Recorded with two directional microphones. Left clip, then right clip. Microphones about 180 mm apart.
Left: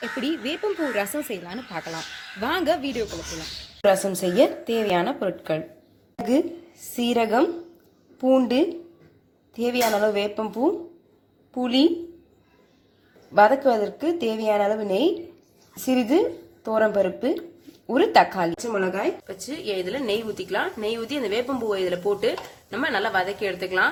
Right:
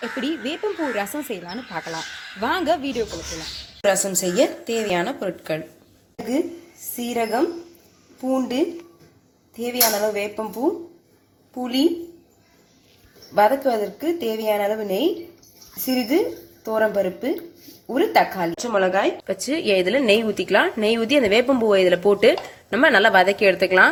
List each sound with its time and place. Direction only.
0.0 s speech: 10° left (ahead or behind)
6.9 s speech: 25° left (ahead or behind)
10.0 s speech: 15° left (ahead or behind)
11.5 s speech: 25° left (ahead or behind)
13.3 s speech: 15° left (ahead or behind)
18.5 s speech: 5° right (ahead or behind)
19.3 s a woman's voice: 30° right (ahead or behind)